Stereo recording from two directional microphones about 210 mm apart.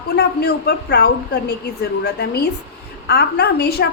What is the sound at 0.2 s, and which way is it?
A woman's voice, 50° left (ahead or behind).